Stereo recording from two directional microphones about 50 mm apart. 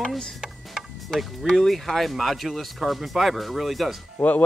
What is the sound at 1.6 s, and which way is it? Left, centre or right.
Speech, centre.